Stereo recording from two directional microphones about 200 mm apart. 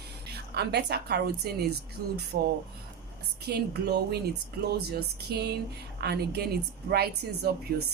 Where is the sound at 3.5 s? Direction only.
55° right (ahead or behind).